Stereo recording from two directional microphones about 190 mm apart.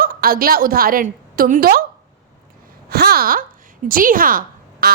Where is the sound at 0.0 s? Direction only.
50° right (ahead or behind).